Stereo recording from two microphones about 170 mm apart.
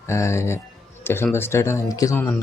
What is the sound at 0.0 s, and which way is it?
Speech, 15° left (ahead or behind).